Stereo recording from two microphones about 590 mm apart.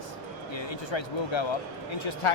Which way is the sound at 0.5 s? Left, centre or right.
Left.